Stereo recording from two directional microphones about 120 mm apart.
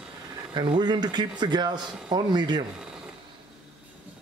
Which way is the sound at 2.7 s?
5° right (ahead or behind).